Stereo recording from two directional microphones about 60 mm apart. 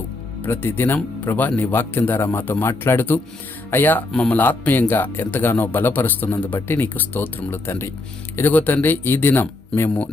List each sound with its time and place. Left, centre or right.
0.4 s speech: left
4.1 s speech: centre
4.4 s speech: left